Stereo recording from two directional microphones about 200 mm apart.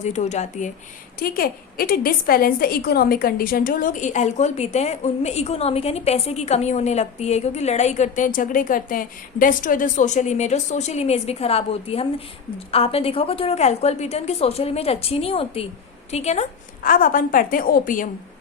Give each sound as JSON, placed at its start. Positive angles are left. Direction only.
{"t": 0.0, "sound": "a woman's voice", "side_deg": 35}
{"t": 1.2, "sound": "a woman's voice", "side_deg": 45}